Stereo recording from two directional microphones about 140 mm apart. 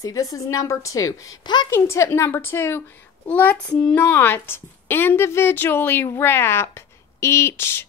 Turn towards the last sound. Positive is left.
turn(degrees=15)  # may be behind; listen again after turning